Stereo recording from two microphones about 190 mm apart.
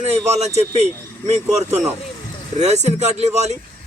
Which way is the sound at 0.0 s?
35° right (ahead or behind).